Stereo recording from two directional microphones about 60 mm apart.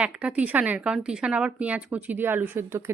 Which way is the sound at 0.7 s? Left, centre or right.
Centre.